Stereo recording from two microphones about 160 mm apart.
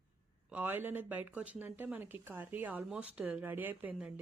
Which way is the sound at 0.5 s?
10° right (ahead or behind).